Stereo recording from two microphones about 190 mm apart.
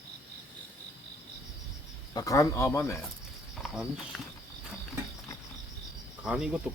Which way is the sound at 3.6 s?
Centre (ahead or behind).